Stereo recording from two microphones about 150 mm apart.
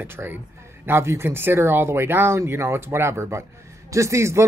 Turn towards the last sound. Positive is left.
turn(degrees=-20)  # may be behind; listen again after turning